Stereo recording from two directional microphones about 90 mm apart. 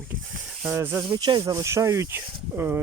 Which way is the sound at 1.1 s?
60° right (ahead or behind).